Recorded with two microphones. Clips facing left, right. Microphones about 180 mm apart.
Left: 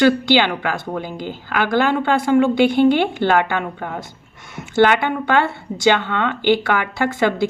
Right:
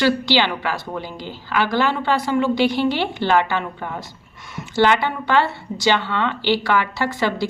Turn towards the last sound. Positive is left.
turn(degrees=50)  # may be behind; listen again after turning